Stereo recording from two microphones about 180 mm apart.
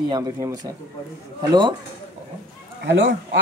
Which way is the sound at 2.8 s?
90° right.